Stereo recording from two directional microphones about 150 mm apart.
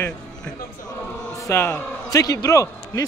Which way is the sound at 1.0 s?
15° left (ahead or behind).